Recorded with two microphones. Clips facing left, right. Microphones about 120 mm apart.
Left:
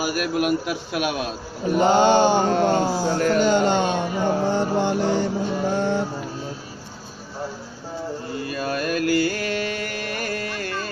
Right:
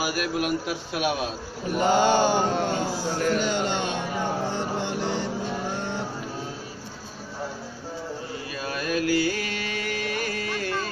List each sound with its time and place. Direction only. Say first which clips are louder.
0.0 s a man's voice: left 4 dB; 50° left (ahead or behind)
1.8 s mantra: left 4 dB; 25° left (ahead or behind)
2.5 s speech: left 6 dB; 45° left (ahead or behind)
4.5 s vehicle: left 7 dB; 45° left (ahead or behind)
8.5 s mantra: left 5 dB; 55° left (ahead or behind)